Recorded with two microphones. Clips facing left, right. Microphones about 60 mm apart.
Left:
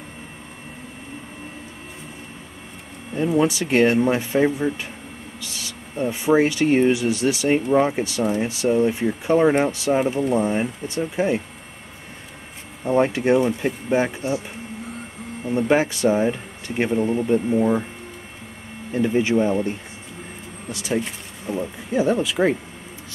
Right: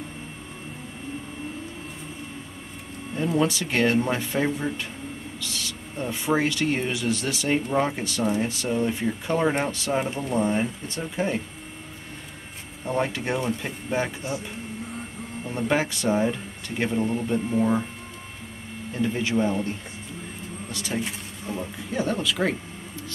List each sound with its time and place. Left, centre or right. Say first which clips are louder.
3.3 s speech: left 6 dB; centre
12.8 s speech: left 8 dB; centre
15.4 s speech: left 6 dB; centre
17.6 s speech: left 3 dB; centre
18.9 s speech: left 6 dB; left
20.7 s speech: left 5 dB; centre